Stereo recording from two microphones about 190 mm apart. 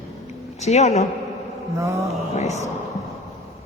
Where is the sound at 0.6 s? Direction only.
35° left (ahead or behind).